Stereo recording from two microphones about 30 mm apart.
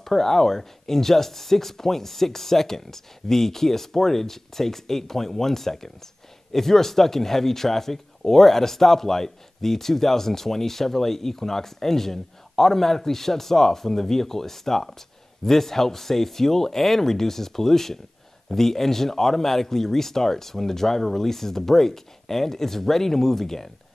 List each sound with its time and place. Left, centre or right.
0.0 s speech: centre